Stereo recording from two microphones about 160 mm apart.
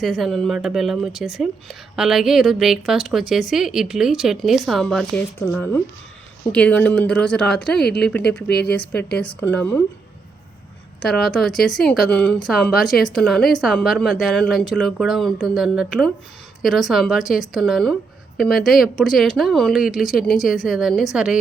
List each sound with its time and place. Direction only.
0.0 s speech: centre (ahead or behind)
8.4 s speech: 90° left
9.4 s speech: 15° left (ahead or behind)
11.0 s speech: 5° left (ahead or behind)